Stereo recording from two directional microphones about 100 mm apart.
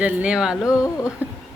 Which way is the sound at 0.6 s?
35° left (ahead or behind).